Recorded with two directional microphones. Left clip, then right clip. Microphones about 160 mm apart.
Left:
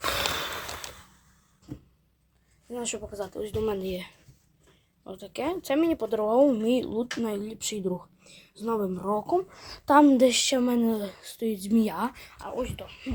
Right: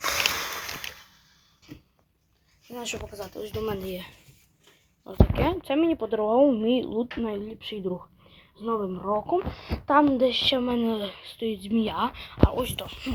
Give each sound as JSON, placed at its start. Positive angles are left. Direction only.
{"t": 0.0, "sound": "sniff", "side_deg": 30}
{"t": 2.7, "sound": "speech", "side_deg": 35}
{"t": 5.0, "sound": "speech", "side_deg": 0}
{"t": 9.8, "sound": "a woman's voice", "side_deg": 45}
{"t": 10.5, "sound": "speech", "side_deg": 25}
{"t": 12.5, "sound": "speech", "side_deg": 0}